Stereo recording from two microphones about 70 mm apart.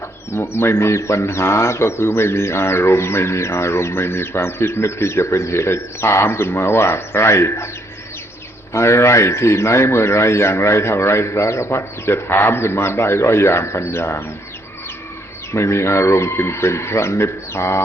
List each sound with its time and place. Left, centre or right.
0.3 s speech: left
8.7 s speech: left
15.5 s speech: left